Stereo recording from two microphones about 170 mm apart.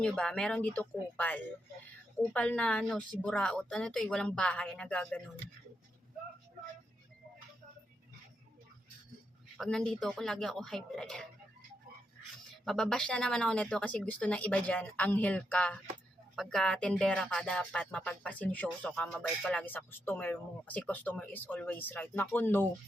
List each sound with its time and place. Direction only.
0.0 s a woman's voice: 5° left (ahead or behind)
9.6 s a woman's voice: 5° left (ahead or behind)
12.6 s speech: 5° left (ahead or behind)